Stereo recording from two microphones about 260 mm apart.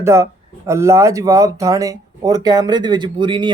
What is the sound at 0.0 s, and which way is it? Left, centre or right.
A man's voice, centre.